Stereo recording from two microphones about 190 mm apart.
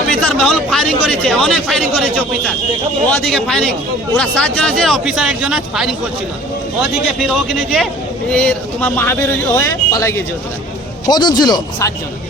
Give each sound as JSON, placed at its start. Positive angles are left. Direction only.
{"t": 0.2, "sound": "speech", "side_deg": 5}
{"t": 7.2, "sound": "speech", "side_deg": 0}